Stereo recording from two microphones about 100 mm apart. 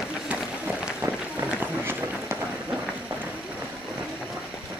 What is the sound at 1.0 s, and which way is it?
Run, 15° right (ahead or behind).